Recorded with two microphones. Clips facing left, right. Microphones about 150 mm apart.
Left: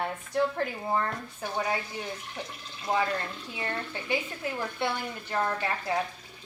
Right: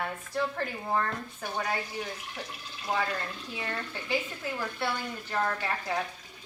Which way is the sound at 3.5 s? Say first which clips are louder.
Left 3 dB; 20° left (ahead or behind).